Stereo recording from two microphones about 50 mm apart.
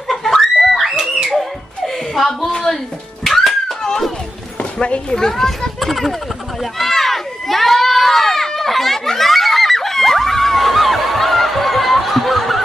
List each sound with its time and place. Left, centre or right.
0.1 s screaming: centre
2.1 s a sound: centre
3.3 s music: centre
4.7 s speech: left
5.1 s a child's voice: centre
6.6 s crowd: centre